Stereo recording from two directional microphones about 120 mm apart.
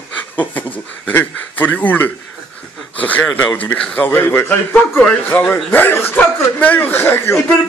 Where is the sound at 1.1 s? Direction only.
15° left (ahead or behind).